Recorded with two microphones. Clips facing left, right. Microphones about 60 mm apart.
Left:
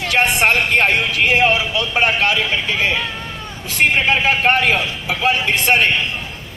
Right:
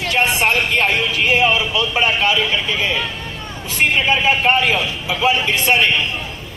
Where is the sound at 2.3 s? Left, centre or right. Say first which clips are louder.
Even; left.